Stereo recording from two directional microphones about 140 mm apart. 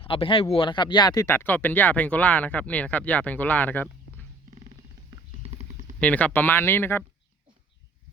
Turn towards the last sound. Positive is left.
turn(degrees=15)  # may be behind; listen again after turning